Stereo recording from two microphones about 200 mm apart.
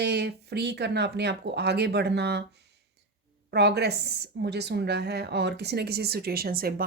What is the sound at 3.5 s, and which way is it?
A woman's voice, 55° right (ahead or behind).